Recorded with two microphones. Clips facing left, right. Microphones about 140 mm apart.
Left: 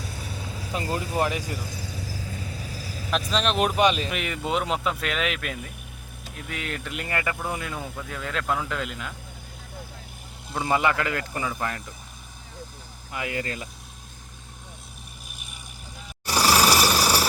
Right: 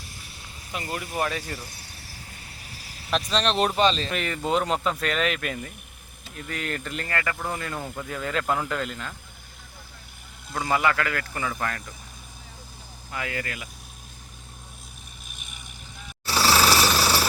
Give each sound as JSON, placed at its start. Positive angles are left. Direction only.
{"t": 0.7, "sound": "a man's voice", "side_deg": 30}
{"t": 1.3, "sound": "speech", "side_deg": 15}
{"t": 3.1, "sound": "speech", "side_deg": 5}
{"t": 7.1, "sound": "speech", "side_deg": 20}
{"t": 10.5, "sound": "a man's voice", "side_deg": 20}
{"t": 13.1, "sound": "a man's voice", "side_deg": 20}
{"t": 16.2, "sound": "a sound", "side_deg": 15}